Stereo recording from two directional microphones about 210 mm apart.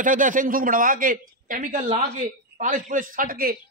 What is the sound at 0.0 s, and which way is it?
A man's voice, 40° right (ahead or behind).